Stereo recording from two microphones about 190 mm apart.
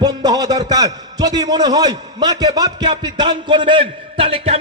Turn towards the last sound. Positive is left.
turn(degrees=-30)  # may be behind; listen again after turning